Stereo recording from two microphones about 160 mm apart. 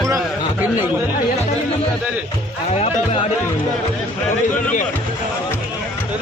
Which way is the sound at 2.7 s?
40° left (ahead or behind).